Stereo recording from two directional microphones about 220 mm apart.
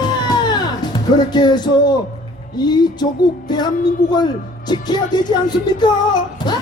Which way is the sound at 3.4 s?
20° left (ahead or behind).